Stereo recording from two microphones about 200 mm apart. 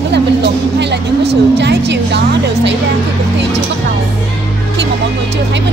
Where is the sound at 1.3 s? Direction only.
60° right (ahead or behind).